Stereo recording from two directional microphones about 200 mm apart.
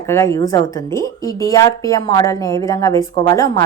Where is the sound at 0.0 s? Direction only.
15° left (ahead or behind).